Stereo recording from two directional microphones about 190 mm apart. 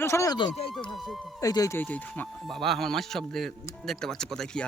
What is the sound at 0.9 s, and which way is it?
Speech, centre (ahead or behind).